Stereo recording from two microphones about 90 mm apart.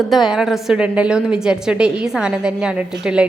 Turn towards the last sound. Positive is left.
turn(degrees=-10)  # may be behind; listen again after turning